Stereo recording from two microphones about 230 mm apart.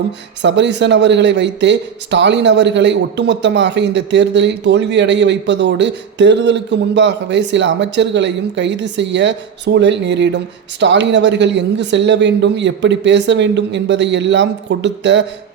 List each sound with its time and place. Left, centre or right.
0.4 s a man's voice: right